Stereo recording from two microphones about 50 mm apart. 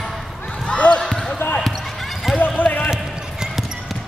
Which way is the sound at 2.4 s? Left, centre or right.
Left.